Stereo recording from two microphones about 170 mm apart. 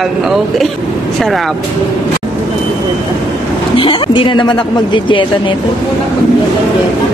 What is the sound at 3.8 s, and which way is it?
Speech, 30° left (ahead or behind).